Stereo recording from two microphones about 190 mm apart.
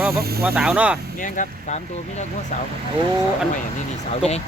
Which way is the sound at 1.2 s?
40° left (ahead or behind).